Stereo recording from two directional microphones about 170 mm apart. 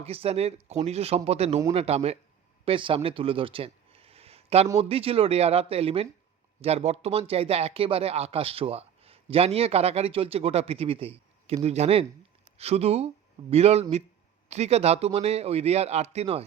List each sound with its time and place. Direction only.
0.0 s speech: 35° right (ahead or behind)